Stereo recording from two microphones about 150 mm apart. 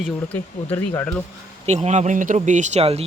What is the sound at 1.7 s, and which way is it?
Speech, 50° right (ahead or behind).